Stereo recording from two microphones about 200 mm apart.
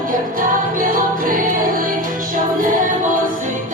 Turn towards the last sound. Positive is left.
turn(degrees=-40)  # may be behind; listen again after turning